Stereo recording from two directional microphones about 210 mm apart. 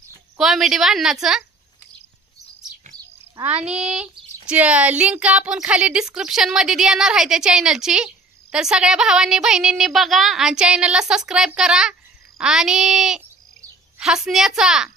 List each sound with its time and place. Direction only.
0.4 s speech: centre (ahead or behind)
3.4 s speech: 25° right (ahead or behind)
4.0 s speech: 5° right (ahead or behind)